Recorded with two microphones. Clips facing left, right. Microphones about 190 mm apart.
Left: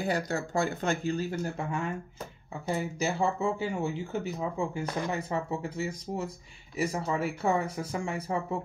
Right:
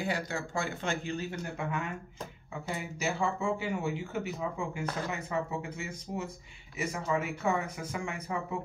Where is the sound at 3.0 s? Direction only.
30° left (ahead or behind).